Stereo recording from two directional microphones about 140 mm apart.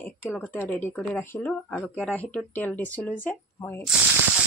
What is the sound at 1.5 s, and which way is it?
Speech, 5° left (ahead or behind).